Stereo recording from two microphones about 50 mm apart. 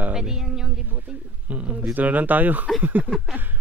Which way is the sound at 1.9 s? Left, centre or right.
Right.